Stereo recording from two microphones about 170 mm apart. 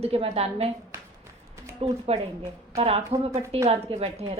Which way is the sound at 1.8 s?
35° right (ahead or behind).